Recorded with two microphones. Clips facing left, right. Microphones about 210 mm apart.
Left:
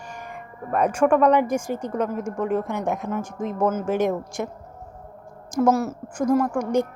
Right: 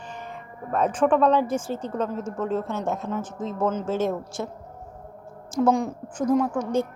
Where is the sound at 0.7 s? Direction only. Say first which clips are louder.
Left 2 dB; 10° left (ahead or behind).